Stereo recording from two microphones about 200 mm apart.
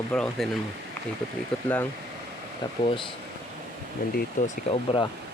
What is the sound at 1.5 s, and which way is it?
Speech, 5° left (ahead or behind).